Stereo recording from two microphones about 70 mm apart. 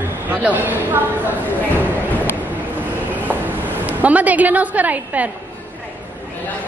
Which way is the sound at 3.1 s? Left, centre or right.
Right.